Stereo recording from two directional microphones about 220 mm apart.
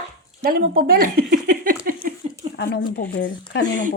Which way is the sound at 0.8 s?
40° right (ahead or behind).